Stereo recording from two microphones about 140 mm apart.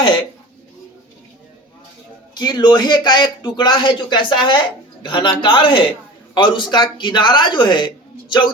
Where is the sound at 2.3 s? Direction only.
30° left (ahead or behind).